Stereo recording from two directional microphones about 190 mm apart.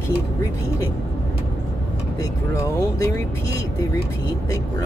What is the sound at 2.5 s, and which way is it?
Speech, 15° left (ahead or behind).